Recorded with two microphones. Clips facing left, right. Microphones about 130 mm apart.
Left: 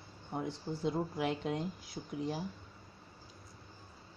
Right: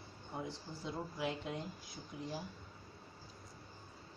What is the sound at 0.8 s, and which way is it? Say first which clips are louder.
Speech: left 6 dB; 65° left (ahead or behind).